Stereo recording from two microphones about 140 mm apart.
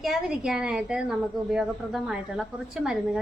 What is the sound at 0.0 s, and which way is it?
A woman's voice, 5° right (ahead or behind).